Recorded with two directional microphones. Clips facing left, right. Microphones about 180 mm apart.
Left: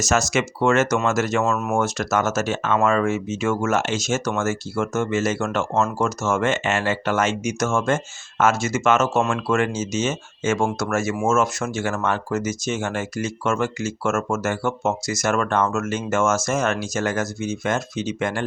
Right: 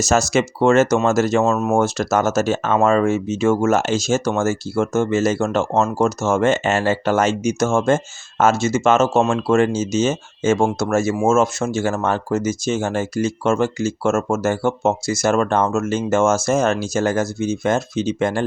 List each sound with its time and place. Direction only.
0.0 s speech: 30° right (ahead or behind)